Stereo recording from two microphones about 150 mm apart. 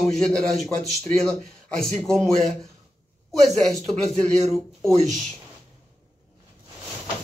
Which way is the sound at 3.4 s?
5° left (ahead or behind).